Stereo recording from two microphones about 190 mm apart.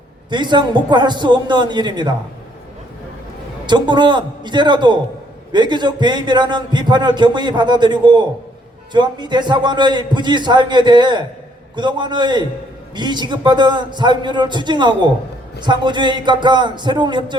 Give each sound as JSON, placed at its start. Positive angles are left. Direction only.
{"t": 0.3, "sound": "a man's voice", "side_deg": -25}
{"t": 3.7, "sound": "a man's voice", "side_deg": -25}